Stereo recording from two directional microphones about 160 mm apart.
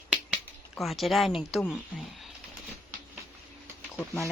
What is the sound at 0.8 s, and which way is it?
Speech, centre (ahead or behind).